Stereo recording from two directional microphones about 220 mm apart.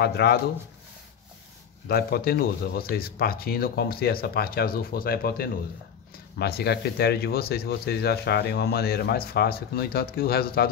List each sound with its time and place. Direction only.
0.0 s speech: 45° left (ahead or behind)
1.9 s speech: 45° left (ahead or behind)